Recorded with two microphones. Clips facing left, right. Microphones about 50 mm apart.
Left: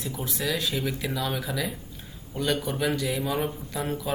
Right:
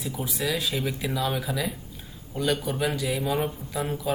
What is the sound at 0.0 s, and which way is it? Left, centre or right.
Speech, centre.